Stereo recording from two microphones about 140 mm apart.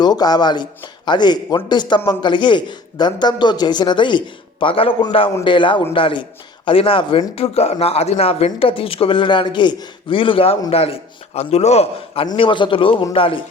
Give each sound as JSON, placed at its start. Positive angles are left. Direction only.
{"t": 0.0, "sound": "a man's voice", "side_deg": 30}